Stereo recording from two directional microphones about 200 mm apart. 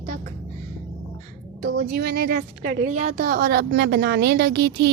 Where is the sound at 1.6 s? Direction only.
50° right (ahead or behind).